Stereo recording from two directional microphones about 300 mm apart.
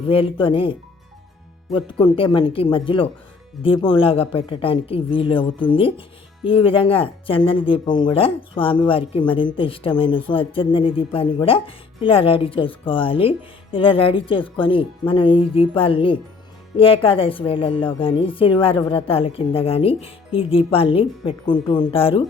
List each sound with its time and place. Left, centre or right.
0.1 s speech: centre